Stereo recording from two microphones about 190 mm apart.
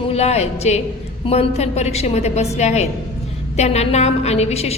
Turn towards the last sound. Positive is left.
turn(degrees=35)  # may be behind; listen again after turning